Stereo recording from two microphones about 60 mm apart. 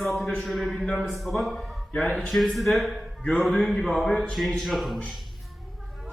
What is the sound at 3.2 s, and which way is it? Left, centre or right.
Speech, centre.